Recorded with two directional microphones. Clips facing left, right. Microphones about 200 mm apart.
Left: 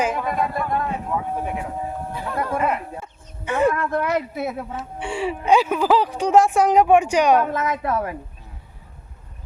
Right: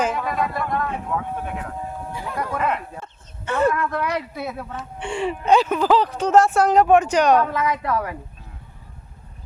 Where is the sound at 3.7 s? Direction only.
45° left (ahead or behind).